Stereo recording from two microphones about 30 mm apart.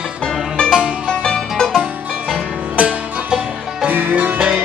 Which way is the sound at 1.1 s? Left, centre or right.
Left.